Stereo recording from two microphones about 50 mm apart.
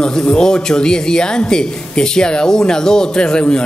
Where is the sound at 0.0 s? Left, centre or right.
Centre.